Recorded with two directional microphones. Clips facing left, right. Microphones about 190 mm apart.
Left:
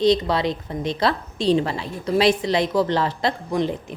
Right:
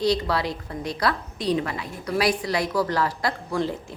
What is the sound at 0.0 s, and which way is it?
A woman's voice, 20° left (ahead or behind).